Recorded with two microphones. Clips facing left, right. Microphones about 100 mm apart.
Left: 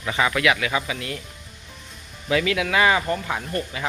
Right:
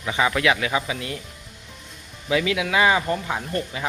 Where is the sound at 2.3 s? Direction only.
15° right (ahead or behind).